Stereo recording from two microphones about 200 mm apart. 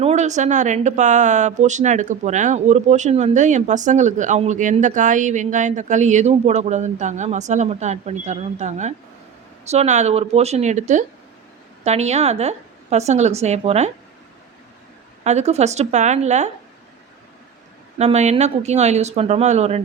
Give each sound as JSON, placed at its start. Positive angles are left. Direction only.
{"t": 0.0, "sound": "speech", "side_deg": -35}
{"t": 15.2, "sound": "speech", "side_deg": -35}
{"t": 17.9, "sound": "speech", "side_deg": -35}